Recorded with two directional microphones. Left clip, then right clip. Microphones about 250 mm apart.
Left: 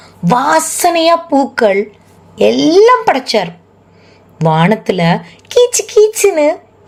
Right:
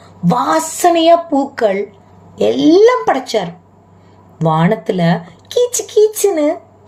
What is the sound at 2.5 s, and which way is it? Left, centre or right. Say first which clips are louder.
Speech: left 2 dB; left.